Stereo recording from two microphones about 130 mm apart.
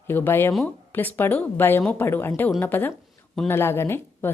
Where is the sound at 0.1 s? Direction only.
15° left (ahead or behind).